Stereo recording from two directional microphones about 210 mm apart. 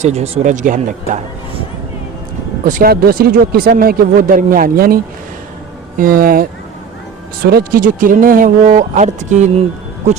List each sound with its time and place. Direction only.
0.0 s speech: 30° right (ahead or behind)
2.6 s a man's voice: 40° right (ahead or behind)
6.0 s a man's voice: 40° right (ahead or behind)